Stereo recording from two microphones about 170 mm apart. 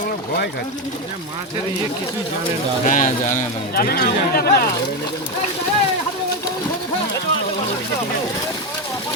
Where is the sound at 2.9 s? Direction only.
50° left (ahead or behind).